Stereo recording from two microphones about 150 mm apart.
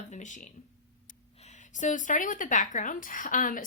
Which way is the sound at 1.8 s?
55° left (ahead or behind).